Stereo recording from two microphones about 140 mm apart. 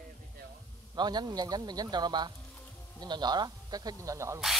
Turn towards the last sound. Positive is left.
turn(degrees=-20)  # may be behind; listen again after turning